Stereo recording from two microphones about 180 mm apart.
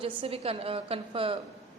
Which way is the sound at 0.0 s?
30° right (ahead or behind).